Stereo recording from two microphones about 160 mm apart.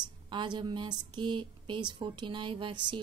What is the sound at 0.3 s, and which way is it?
A woman's voice, 30° right (ahead or behind).